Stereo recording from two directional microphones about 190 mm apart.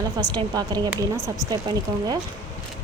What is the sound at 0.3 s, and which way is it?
Speech, 20° right (ahead or behind).